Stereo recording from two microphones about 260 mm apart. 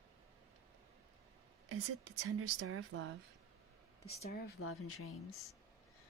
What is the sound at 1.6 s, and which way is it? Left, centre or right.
Speech, right.